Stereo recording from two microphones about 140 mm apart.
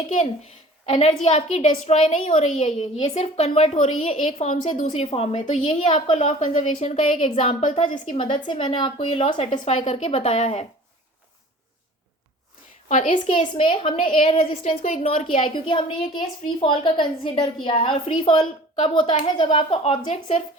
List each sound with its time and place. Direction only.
0.1 s a woman's voice: 50° left (ahead or behind)
2.2 s a woman's voice: 55° left (ahead or behind)
6.8 s a woman's voice: 45° left (ahead or behind)
7.6 s a woman's voice: 65° left (ahead or behind)
8.1 s a woman's voice: 40° left (ahead or behind)
9.5 s a woman's voice: 55° left (ahead or behind)
12.9 s a woman's voice: 65° left (ahead or behind)
13.6 s a woman's voice: 35° left (ahead or behind)
14.6 s a woman's voice: 50° left (ahead or behind)
20.0 s a woman's voice: 55° left (ahead or behind)